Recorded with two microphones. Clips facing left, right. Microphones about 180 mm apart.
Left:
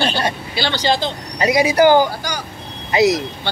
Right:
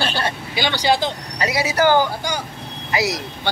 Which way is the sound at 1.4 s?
15° left (ahead or behind).